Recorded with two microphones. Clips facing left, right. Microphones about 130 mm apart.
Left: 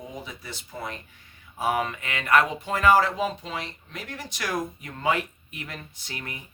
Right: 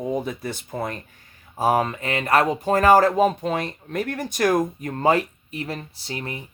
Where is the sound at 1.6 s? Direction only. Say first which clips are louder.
Right 6 dB; 35° right (ahead or behind).